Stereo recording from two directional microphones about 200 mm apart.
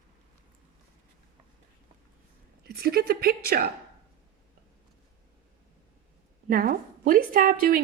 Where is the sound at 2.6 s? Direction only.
50° right (ahead or behind).